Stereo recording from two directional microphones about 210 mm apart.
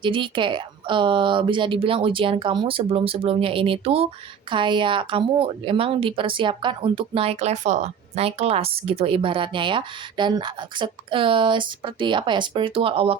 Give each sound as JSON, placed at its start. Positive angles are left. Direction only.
{"t": 0.0, "sound": "speech", "side_deg": -25}